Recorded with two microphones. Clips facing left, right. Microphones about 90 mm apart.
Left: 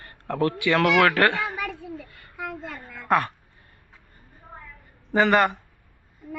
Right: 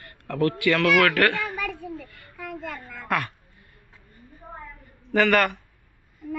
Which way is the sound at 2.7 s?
30° left (ahead or behind).